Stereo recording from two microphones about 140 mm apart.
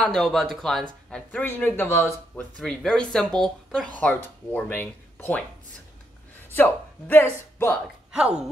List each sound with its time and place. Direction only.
0.0 s speech: 5° left (ahead or behind)
1.1 s speech: 10° left (ahead or behind)
2.6 s speech: 5° left (ahead or behind)
6.5 s speech: 15° left (ahead or behind)
8.2 s speech: 5° right (ahead or behind)